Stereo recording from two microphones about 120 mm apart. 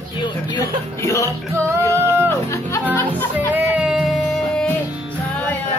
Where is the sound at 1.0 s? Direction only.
25° left (ahead or behind).